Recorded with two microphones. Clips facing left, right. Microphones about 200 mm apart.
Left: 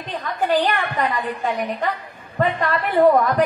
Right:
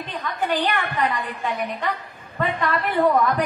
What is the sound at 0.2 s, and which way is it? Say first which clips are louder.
A woman's voice: left 4 dB; 45° left (ahead or behind).